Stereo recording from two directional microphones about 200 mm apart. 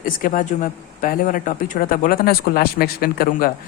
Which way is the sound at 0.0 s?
45° left (ahead or behind).